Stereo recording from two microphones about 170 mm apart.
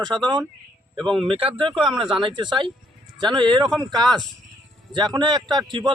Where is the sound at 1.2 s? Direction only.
30° right (ahead or behind).